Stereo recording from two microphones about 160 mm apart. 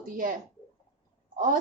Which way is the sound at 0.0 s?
60° right (ahead or behind).